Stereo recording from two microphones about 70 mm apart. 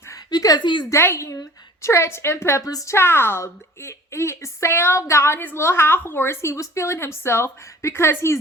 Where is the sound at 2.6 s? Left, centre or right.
Left.